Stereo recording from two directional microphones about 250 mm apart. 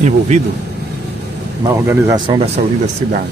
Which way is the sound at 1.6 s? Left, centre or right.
Centre.